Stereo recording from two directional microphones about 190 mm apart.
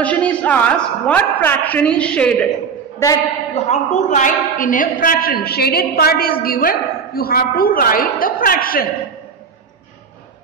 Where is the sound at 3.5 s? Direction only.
35° left (ahead or behind).